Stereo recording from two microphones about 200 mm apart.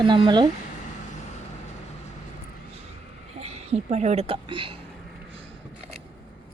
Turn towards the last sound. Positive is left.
turn(degrees=-25)  # may be behind; listen again after turning